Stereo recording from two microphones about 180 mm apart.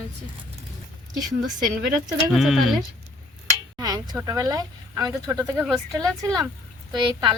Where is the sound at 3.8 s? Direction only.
20° right (ahead or behind).